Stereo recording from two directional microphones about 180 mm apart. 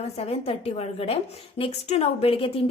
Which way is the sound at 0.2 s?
35° left (ahead or behind).